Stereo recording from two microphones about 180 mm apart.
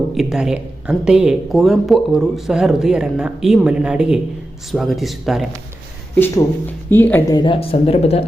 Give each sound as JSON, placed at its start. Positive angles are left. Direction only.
{"t": 0.1, "sound": "speech", "side_deg": 0}
{"t": 6.1, "sound": "speech", "side_deg": 10}
{"t": 7.3, "sound": "speech", "side_deg": 30}